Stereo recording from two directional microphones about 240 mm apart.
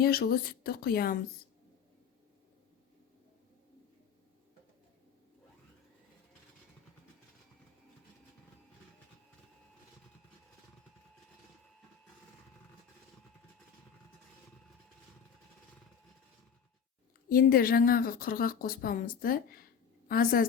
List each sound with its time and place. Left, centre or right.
0.0 s speech: left
17.2 s a woman's voice: left